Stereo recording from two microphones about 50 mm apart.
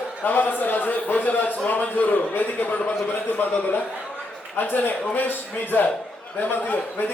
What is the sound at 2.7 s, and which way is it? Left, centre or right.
Speech, left.